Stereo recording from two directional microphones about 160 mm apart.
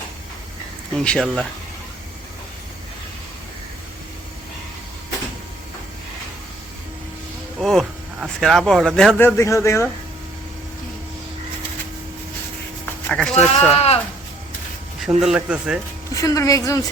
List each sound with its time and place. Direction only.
0.9 s speech: 5° left (ahead or behind)
7.6 s a sound: centre (ahead or behind)
9.0 s speech: centre (ahead or behind)
9.2 s speech: 15° left (ahead or behind)
13.1 s speech: 5° left (ahead or behind)
13.7 s speech: 40° left (ahead or behind)
15.2 s speech: 5° right (ahead or behind)
16.1 s a woman's voice: 20° left (ahead or behind)